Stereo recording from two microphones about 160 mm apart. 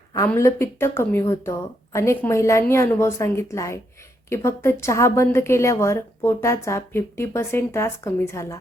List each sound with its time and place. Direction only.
0.3 s a woman's voice: 15° left (ahead or behind)